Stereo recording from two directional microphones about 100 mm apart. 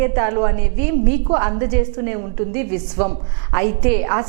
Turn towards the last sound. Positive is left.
turn(degrees=-15)  # may be behind; listen again after turning